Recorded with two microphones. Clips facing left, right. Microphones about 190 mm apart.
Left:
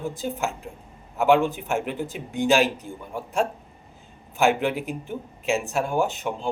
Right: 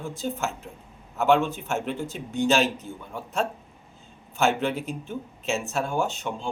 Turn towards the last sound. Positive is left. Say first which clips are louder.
# left 3 dB
turn(degrees=15)  # may be behind; listen again after turning